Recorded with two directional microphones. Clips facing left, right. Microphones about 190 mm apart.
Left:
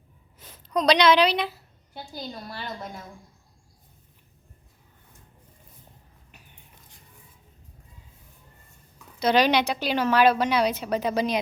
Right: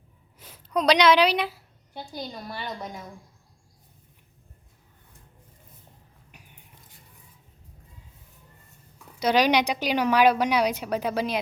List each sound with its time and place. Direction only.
0.3 s a sound: 10° right (ahead or behind)
2.6 s a woman's voice: 15° right (ahead or behind)
6.3 s biting: 10° right (ahead or behind)
9.1 s a woman's voice: 10° right (ahead or behind)